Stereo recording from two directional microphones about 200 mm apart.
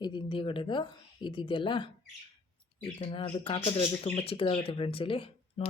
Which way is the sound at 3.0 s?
25° left (ahead or behind).